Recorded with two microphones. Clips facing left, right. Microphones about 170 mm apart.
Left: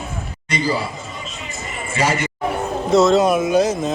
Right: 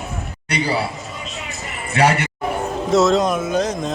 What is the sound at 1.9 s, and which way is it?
Speech, 65° right (ahead or behind).